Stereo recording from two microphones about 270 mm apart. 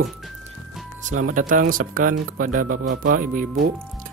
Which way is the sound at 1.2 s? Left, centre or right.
Right.